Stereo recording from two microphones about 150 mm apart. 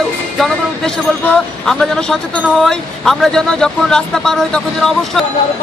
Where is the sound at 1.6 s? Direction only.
5° left (ahead or behind).